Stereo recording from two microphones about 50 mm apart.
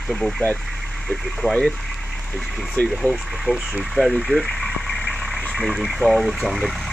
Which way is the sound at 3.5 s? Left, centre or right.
Centre.